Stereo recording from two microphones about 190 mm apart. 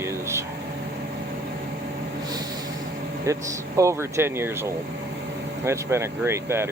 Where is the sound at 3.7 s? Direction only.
15° right (ahead or behind).